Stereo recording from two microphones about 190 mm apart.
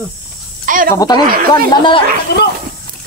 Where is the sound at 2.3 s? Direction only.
60° left (ahead or behind).